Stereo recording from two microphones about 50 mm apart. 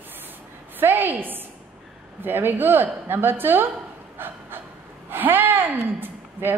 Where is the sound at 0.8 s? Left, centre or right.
Right.